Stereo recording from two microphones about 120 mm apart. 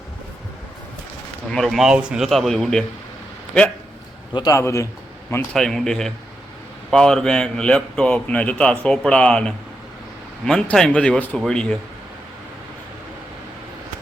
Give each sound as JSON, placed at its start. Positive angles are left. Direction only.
{"t": 1.5, "sound": "speech", "side_deg": 0}
{"t": 4.4, "sound": "a man's voice", "side_deg": 25}
{"t": 5.5, "sound": "a man's voice", "side_deg": 5}